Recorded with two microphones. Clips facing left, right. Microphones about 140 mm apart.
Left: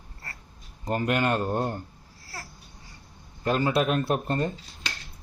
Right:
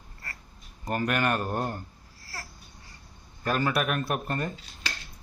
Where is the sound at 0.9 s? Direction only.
20° left (ahead or behind).